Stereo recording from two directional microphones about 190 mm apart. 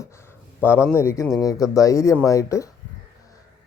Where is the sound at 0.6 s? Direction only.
10° left (ahead or behind).